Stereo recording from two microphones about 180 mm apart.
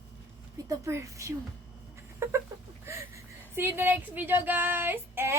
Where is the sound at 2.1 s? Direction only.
15° right (ahead or behind).